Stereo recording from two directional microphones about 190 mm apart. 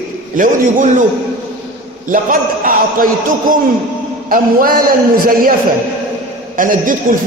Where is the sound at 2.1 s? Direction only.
45° right (ahead or behind).